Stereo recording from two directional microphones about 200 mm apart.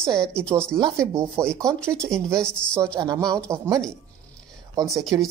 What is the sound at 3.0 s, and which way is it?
Speech, 20° right (ahead or behind).